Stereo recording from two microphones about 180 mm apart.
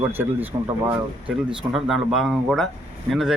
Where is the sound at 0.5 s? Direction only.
20° right (ahead or behind).